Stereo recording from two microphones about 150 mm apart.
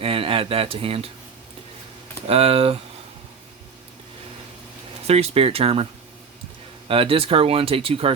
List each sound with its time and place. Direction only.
0.0 s speech: 40° right (ahead or behind)
2.2 s speech: 40° right (ahead or behind)
5.0 s speech: 45° right (ahead or behind)